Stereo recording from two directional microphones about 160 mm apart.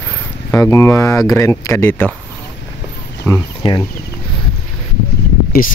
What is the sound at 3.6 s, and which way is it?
Speech, 30° left (ahead or behind).